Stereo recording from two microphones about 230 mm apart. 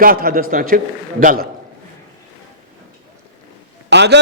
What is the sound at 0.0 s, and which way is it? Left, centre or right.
A man's voice, right.